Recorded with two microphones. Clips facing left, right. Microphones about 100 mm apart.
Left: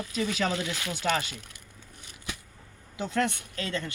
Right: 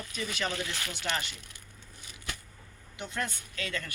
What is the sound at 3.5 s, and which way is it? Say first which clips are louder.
Speech: left 2 dB; 30° left (ahead or behind).